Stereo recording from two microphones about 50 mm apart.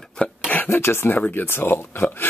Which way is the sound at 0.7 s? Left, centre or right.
Left.